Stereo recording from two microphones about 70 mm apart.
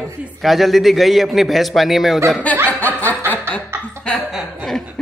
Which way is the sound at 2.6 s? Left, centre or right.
Left.